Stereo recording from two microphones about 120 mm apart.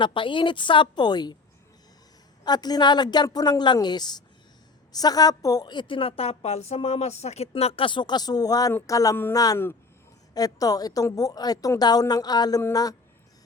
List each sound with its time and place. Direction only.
0.0 s a woman's voice: 45° left (ahead or behind)
2.4 s a woman's voice: 35° left (ahead or behind)